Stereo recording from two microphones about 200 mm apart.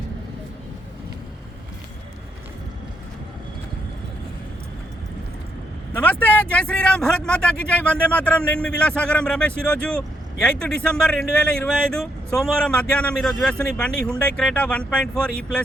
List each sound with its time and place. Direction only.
6.0 s speech: 10° left (ahead or behind)